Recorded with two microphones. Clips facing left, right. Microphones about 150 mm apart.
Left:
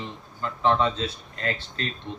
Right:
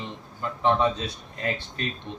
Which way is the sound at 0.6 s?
15° right (ahead or behind).